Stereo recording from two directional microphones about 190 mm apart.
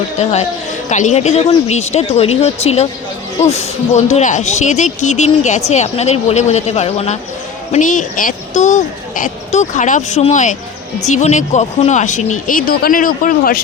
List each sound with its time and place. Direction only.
0.2 s speech: 35° left (ahead or behind)